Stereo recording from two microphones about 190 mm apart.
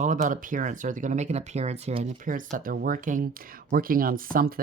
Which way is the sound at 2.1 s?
45° right (ahead or behind).